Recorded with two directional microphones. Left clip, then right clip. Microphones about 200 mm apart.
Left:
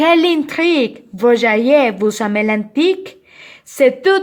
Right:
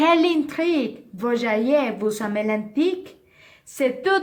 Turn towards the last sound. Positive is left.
turn(degrees=40)  # may be behind; listen again after turning